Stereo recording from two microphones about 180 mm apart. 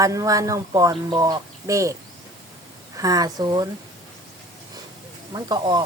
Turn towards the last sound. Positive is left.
turn(degrees=-20)  # may be behind; listen again after turning